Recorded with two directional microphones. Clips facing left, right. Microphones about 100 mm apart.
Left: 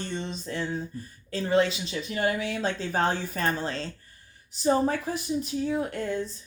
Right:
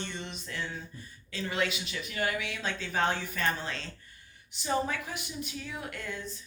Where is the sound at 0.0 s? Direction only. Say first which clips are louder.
Left 6 dB; 35° left (ahead or behind).